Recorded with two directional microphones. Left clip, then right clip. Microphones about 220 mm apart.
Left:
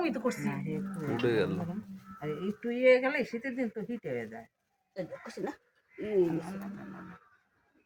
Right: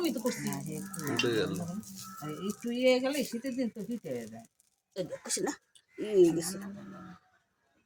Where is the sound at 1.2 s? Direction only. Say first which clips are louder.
Left 3 dB; centre (ahead or behind).